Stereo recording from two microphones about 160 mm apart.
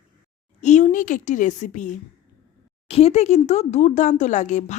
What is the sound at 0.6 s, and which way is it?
Speech, 50° left (ahead or behind).